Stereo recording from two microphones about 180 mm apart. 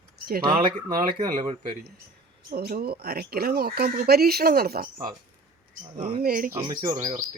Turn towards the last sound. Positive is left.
turn(degrees=-20)  # may be behind; listen again after turning